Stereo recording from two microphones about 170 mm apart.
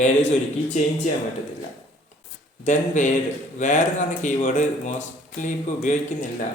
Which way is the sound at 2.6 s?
45° left (ahead or behind).